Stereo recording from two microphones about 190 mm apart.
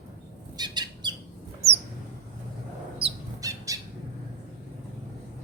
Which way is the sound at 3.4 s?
15° right (ahead or behind).